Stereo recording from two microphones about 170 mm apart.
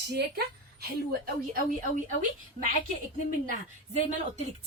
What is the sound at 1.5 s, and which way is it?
Speech, 50° right (ahead or behind).